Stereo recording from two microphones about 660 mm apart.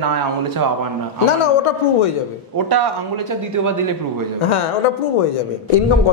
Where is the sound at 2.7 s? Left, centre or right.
Right.